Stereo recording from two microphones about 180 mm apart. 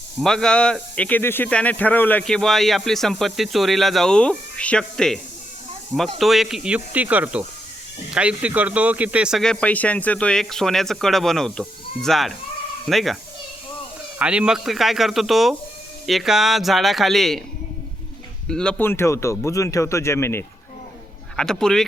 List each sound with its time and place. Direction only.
0.2 s speech: 5° left (ahead or behind)
14.2 s speech: 5° right (ahead or behind)
18.4 s speech: 5° left (ahead or behind)
21.3 s speech: 5° left (ahead or behind)